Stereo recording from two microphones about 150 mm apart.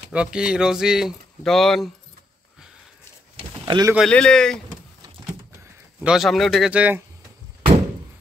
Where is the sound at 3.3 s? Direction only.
30° right (ahead or behind).